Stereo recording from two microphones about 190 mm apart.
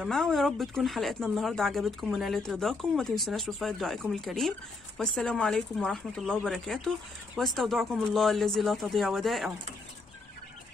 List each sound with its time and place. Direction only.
0.0 s speech: 5° left (ahead or behind)